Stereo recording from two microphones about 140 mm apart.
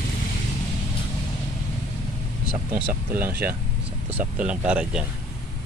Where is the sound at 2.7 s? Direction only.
15° right (ahead or behind).